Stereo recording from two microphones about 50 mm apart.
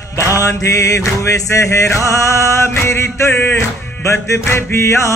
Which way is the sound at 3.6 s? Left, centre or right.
Left.